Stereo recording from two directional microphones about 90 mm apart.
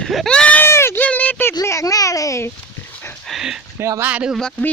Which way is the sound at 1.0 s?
15° left (ahead or behind).